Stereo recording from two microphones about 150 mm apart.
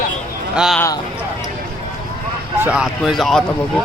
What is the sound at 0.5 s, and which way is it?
Speech, 5° right (ahead or behind).